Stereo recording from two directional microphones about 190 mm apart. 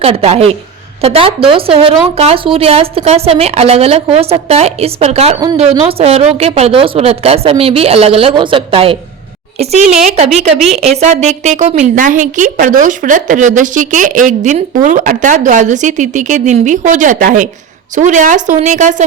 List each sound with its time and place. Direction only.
0.0 s speech: 30° right (ahead or behind)